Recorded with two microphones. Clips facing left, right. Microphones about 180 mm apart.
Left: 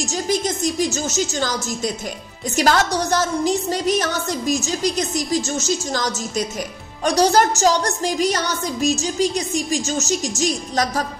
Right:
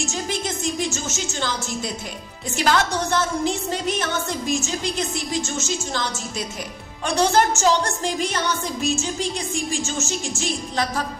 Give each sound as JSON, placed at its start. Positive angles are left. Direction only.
{"t": 0.0, "sound": "a woman's voice", "side_deg": 40}
{"t": 2.5, "sound": "music", "side_deg": 40}